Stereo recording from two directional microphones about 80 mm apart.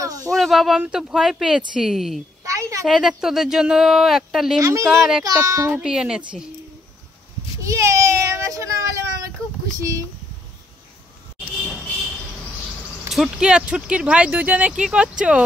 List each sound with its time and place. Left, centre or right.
0.0 s a sound: right
0.3 s speech: centre
2.4 s a sound: right
2.9 s speech: centre
4.6 s child singing: right
4.8 s speech: centre
5.2 s child singing: right
5.8 s speech: centre
7.6 s a sound: right
13.1 s speech: centre